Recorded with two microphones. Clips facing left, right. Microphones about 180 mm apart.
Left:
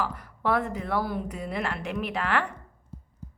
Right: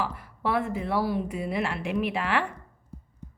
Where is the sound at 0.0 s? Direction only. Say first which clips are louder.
Even; 45° left (ahead or behind).